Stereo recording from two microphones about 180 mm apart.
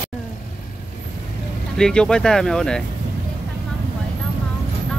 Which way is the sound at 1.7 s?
5° left (ahead or behind).